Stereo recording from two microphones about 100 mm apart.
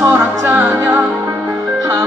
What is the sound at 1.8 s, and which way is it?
Music, 40° right (ahead or behind).